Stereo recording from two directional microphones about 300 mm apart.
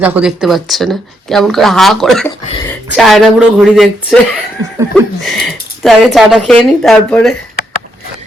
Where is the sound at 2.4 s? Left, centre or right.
Centre.